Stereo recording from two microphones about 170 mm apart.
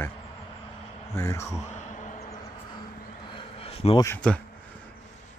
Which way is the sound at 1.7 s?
45° left (ahead or behind).